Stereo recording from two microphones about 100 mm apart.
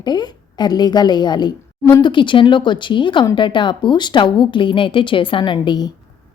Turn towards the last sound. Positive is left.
turn(degrees=50)  # may be behind; listen again after turning